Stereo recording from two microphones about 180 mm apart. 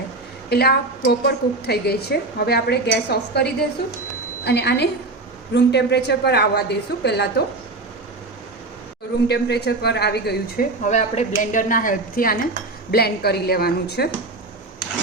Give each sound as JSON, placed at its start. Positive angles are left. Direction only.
{"t": 0.5, "sound": "a woman's voice", "side_deg": 60}
{"t": 9.2, "sound": "a woman's voice", "side_deg": 65}
{"t": 10.8, "sound": "a woman's voice", "side_deg": 40}